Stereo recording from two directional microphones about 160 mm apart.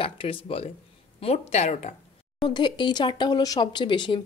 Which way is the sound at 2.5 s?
30° left (ahead or behind).